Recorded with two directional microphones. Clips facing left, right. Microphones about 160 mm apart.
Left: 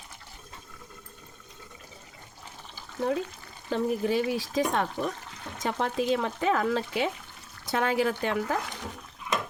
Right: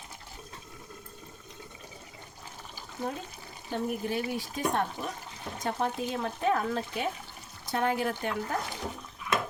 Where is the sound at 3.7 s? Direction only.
90° left.